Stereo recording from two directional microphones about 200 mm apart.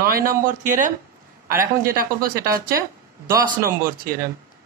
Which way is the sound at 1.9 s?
45° right (ahead or behind).